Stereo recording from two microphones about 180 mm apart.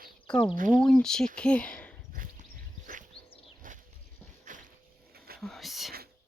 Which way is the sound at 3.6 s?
50° right (ahead or behind).